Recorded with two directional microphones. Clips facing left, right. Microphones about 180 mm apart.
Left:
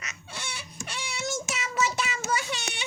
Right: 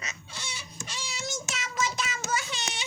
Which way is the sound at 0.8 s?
65° left (ahead or behind).